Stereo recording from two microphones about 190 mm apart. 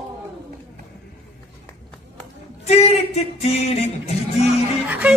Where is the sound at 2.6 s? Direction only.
35° left (ahead or behind).